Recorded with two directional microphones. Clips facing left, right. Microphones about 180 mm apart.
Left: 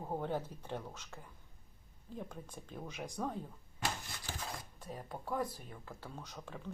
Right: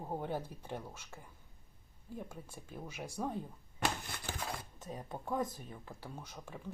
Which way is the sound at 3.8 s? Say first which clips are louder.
Right 3 dB; 60° right (ahead or behind).